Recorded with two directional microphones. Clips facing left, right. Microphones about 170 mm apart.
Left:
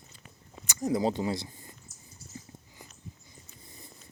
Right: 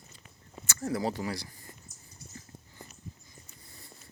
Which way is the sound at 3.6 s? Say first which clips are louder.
Left 6 dB; 20° left (ahead or behind).